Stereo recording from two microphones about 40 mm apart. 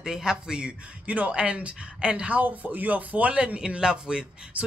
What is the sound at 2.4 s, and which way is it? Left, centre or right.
Speech, right.